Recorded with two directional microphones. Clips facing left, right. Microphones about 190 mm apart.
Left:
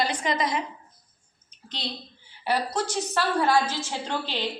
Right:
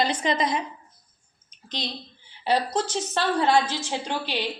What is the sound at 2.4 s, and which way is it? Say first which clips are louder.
A woman's voice: right 2 dB; 20° right (ahead or behind).